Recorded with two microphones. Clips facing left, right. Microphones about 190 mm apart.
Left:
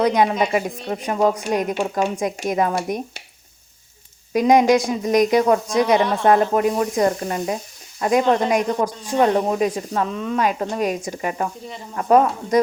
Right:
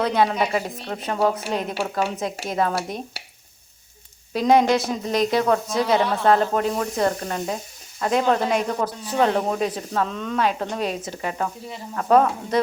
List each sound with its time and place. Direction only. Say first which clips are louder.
0.0 s speech: left 3 dB; 15° left (ahead or behind)
4.4 s speech: left 3 dB; 15° left (ahead or behind)